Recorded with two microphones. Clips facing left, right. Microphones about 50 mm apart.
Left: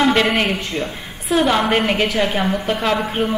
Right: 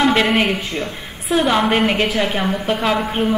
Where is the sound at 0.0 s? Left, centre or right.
Centre.